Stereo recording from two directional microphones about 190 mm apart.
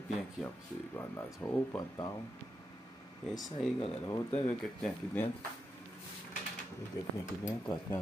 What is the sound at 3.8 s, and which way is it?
Speech, 30° left (ahead or behind).